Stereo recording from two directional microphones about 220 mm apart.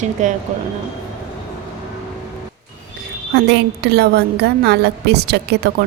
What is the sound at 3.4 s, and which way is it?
A woman's voice, 50° right (ahead or behind).